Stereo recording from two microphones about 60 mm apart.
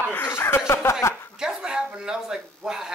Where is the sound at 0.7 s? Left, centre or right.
Left.